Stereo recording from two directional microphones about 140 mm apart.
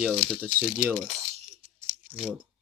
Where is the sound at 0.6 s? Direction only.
15° right (ahead or behind).